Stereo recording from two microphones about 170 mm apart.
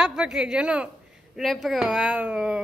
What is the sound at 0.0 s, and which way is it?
A woman's voice, 5° right (ahead or behind).